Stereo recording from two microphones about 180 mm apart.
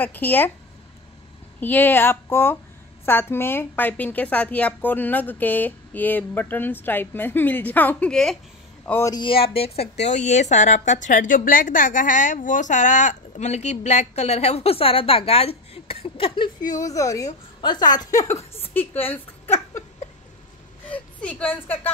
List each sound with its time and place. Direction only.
0.0 s a woman's voice: 10° left (ahead or behind)
1.6 s a woman's voice: 10° left (ahead or behind)
9.1 s a woman's voice: 30° left (ahead or behind); by 19.8 s 10° left (ahead or behind)
20.9 s a woman's voice: 5° left (ahead or behind)